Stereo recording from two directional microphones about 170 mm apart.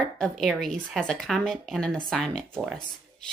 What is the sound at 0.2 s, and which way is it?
Speech, centre (ahead or behind).